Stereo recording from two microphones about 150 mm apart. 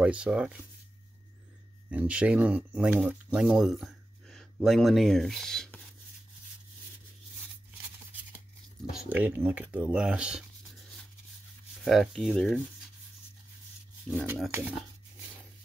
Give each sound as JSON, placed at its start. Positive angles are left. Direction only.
{"t": 0.0, "sound": "speech", "side_deg": -5}
{"t": 1.9, "sound": "speech", "side_deg": -10}
{"t": 7.7, "sound": "a sound", "side_deg": -10}
{"t": 8.9, "sound": "speech", "side_deg": -10}
{"t": 11.8, "sound": "speech", "side_deg": 0}
{"t": 14.5, "sound": "speech", "side_deg": -10}